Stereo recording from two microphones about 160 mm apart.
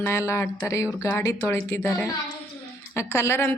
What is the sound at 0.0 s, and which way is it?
A woman's voice, 15° left (ahead or behind).